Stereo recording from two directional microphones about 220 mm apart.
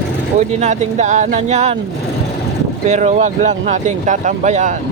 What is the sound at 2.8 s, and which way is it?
Speech, 30° right (ahead or behind).